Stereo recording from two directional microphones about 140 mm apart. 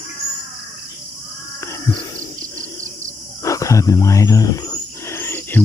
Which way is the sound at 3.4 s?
25° left (ahead or behind).